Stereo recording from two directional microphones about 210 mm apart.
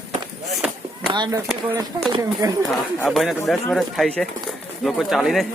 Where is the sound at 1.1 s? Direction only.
20° right (ahead or behind).